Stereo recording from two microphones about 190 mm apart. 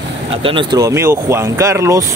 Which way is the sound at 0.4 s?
25° right (ahead or behind).